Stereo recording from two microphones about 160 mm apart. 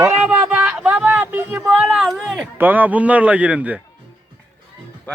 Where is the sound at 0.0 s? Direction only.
10° right (ahead or behind).